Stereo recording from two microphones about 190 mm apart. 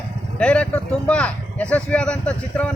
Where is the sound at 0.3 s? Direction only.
5° left (ahead or behind).